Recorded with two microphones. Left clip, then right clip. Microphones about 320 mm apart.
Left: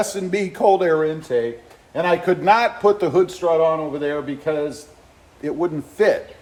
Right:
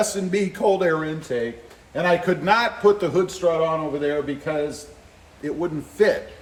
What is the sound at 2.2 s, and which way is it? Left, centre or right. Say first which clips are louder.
A man's voice: left 4 dB; centre.